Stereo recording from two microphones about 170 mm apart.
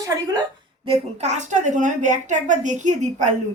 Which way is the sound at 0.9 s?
45° right (ahead or behind).